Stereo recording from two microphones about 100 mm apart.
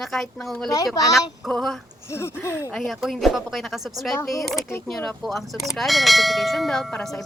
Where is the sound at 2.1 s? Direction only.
25° left (ahead or behind).